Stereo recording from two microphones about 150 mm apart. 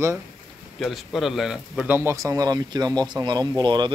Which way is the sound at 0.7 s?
Centre (ahead or behind).